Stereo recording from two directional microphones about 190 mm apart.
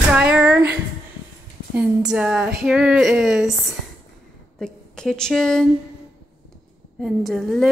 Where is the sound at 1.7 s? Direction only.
5° right (ahead or behind).